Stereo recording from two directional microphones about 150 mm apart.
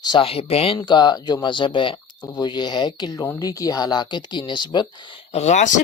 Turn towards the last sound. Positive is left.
turn(degrees=55)  # may be behind; listen again after turning